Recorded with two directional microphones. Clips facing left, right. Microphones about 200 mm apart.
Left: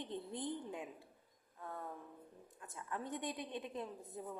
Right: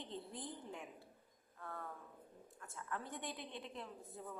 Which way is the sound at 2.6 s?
20° left (ahead or behind).